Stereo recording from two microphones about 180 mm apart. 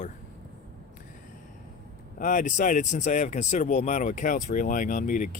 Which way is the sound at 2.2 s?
45° left (ahead or behind).